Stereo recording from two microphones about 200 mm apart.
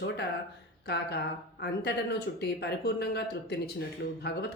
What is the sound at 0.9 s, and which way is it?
A woman's voice, 55° left (ahead or behind).